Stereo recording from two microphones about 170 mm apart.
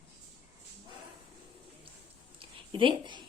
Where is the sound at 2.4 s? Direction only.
30° right (ahead or behind).